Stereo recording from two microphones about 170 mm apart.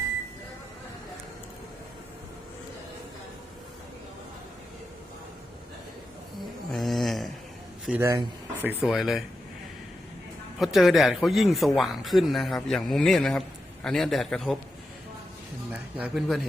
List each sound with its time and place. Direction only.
6.7 s snoring: centre (ahead or behind)
7.9 s a man's voice: 15° right (ahead or behind)
8.8 s a man's voice: centre (ahead or behind)
10.6 s a man's voice: centre (ahead or behind)
15.7 s speech: 10° right (ahead or behind)